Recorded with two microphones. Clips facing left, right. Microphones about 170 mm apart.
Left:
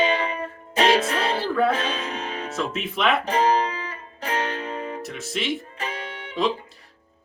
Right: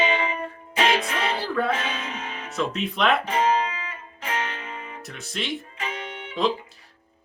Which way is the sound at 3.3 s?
35° left (ahead or behind).